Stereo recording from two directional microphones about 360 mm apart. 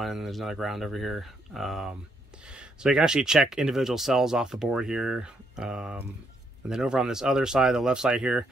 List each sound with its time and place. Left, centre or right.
0.0 s speech: centre